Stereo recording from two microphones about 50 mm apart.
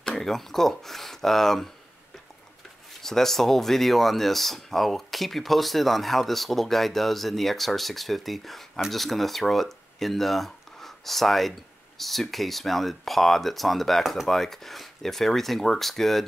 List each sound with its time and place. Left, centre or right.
0.0 s speech: centre
2.9 s speech: centre